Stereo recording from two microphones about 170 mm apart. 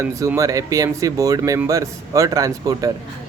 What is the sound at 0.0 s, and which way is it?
Speech, 15° right (ahead or behind).